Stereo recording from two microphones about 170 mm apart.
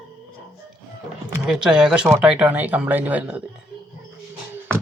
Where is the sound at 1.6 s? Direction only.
5° right (ahead or behind).